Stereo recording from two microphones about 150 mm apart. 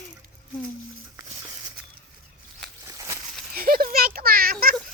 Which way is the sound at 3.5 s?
75° right (ahead or behind).